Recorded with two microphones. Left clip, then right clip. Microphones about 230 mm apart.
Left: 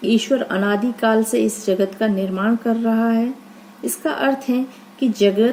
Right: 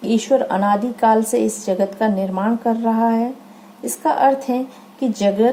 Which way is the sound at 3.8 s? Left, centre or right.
Centre.